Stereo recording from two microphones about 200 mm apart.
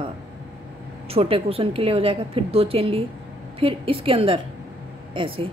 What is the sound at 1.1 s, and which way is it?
A woman's voice, 30° right (ahead or behind).